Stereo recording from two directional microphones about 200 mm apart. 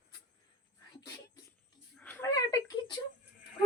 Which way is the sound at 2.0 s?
10° left (ahead or behind).